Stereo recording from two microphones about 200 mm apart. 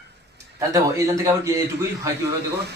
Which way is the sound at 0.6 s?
15° right (ahead or behind).